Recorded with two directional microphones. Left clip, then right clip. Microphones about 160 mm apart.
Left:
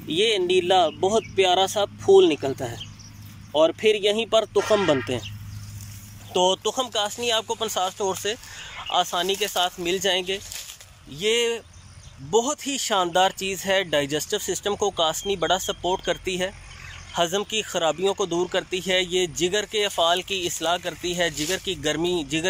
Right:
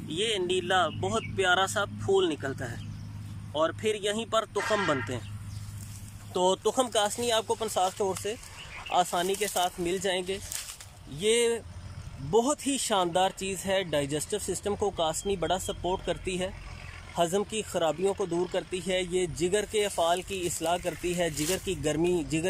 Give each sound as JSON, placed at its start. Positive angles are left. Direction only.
{"t": 0.1, "sound": "speech", "side_deg": 20}
{"t": 6.3, "sound": "speech", "side_deg": 5}